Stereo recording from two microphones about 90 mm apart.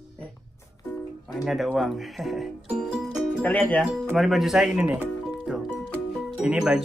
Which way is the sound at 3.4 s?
15° left (ahead or behind).